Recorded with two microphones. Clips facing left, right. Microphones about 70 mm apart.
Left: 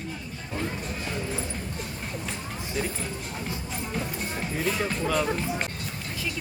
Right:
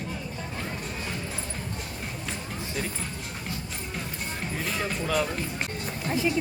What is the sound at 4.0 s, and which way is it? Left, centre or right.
Music, centre.